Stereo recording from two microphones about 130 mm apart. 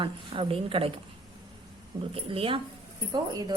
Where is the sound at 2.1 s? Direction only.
45° right (ahead or behind).